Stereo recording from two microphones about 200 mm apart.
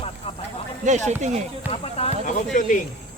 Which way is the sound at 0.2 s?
30° left (ahead or behind).